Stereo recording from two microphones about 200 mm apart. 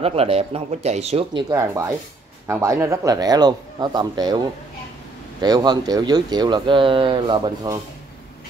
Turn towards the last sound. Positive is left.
turn(degrees=-20)  # may be behind; listen again after turning